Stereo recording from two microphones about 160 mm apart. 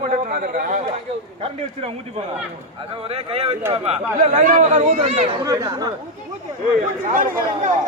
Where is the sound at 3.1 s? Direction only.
40° right (ahead or behind).